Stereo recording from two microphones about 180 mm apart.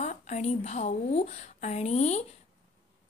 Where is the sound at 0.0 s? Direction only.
40° left (ahead or behind).